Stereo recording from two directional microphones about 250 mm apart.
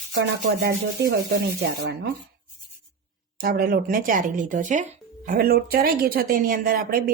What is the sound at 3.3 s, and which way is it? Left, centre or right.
Speech, right.